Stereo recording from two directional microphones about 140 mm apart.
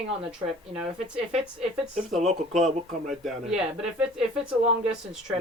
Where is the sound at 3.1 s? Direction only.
Centre (ahead or behind).